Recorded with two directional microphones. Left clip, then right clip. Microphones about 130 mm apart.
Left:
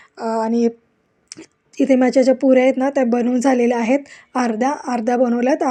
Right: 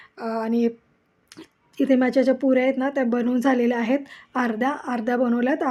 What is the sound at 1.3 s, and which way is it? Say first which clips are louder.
Speech: left 6 dB; 30° left (ahead or behind).